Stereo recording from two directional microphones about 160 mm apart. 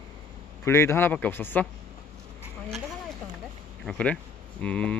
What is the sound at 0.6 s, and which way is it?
Speech, 15° left (ahead or behind).